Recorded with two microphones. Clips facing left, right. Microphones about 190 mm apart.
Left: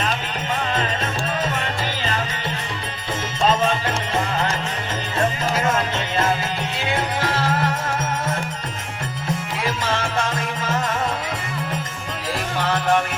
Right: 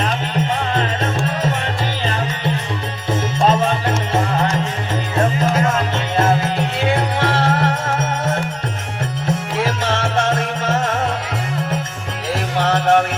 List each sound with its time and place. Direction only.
3.4 s music: 55° right (ahead or behind)
7.2 s music: 60° right (ahead or behind)
9.9 s music: 70° right (ahead or behind)
12.6 s music: 65° right (ahead or behind)